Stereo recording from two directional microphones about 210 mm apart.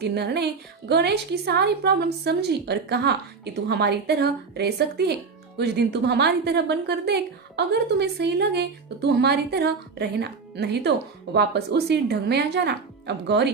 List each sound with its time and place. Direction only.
0.0 s a woman's voice: 50° right (ahead or behind)